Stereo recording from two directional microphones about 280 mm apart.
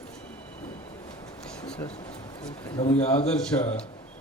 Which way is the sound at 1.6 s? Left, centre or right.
Centre.